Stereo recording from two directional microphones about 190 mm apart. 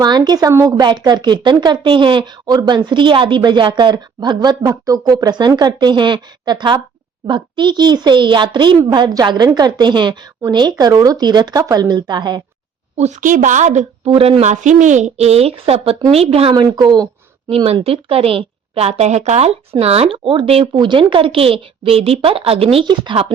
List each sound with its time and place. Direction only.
0.0 s a woman's voice: 20° right (ahead or behind)
13.0 s a woman's voice: 40° right (ahead or behind)
14.0 s a woman's voice: 30° right (ahead or behind)